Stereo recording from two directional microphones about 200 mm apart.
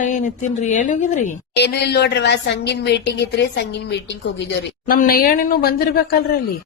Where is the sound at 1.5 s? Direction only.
55° left (ahead or behind).